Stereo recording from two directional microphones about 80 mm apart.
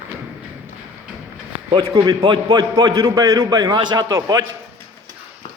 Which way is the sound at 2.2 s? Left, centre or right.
Right.